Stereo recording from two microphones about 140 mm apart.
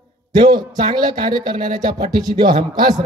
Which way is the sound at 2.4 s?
30° right (ahead or behind).